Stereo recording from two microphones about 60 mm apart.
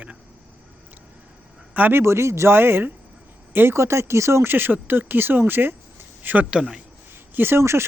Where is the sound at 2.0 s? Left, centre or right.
Right.